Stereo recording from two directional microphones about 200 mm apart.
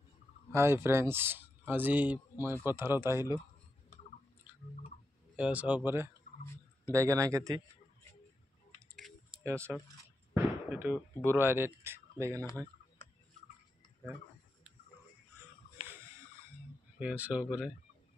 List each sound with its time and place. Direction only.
0.5 s speech: 15° right (ahead or behind)
5.3 s speech: 5° right (ahead or behind)
9.4 s speech: 15° right (ahead or behind)
10.3 s a sound: 10° right (ahead or behind)
11.3 s speech: 10° right (ahead or behind)
17.0 s speech: 5° right (ahead or behind)